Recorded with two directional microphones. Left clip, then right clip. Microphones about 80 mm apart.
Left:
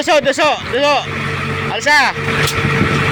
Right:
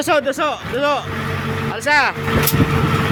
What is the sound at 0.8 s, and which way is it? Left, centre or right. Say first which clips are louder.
Speech: left 2 dB; centre.